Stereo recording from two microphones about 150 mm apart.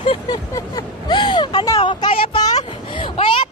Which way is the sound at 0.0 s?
35° left (ahead or behind).